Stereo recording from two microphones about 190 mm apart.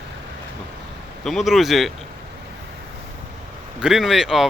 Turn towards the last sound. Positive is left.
turn(degrees=0)  # may be behind; listen again after turning